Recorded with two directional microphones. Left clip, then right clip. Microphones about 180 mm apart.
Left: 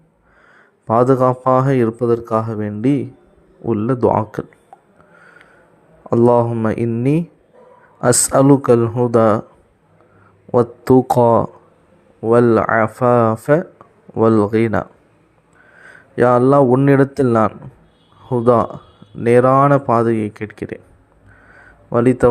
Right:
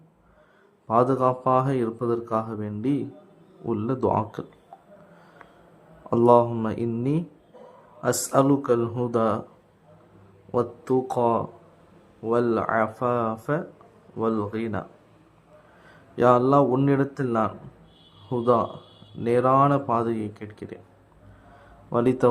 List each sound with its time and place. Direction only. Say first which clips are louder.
0.9 s speech: left 8 dB; 30° left (ahead or behind)
6.1 s speech: left 5 dB; 30° left (ahead or behind)
8.8 s speech: left 10 dB; 15° left (ahead or behind)
9.0 s speech: left 11 dB; 35° left (ahead or behind)
10.5 s speech: left 11 dB; 40° left (ahead or behind)
15.8 s a sound: left 7 dB; 25° left (ahead or behind)
16.8 s speech: left 10 dB; 40° left (ahead or behind)
21.8 s speech: left 8 dB; 25° left (ahead or behind)